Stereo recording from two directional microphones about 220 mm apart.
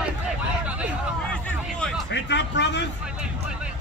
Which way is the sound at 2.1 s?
50° left (ahead or behind).